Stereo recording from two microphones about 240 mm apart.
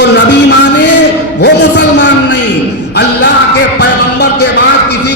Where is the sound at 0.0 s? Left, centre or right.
Left.